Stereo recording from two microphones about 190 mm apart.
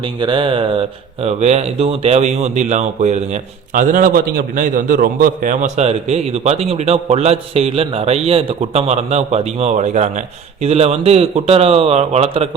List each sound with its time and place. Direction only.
0.0 s speech: 25° right (ahead or behind)